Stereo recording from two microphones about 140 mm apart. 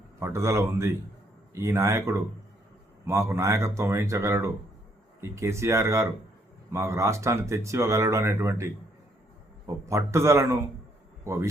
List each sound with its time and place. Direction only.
0.2 s a man's voice: 20° right (ahead or behind)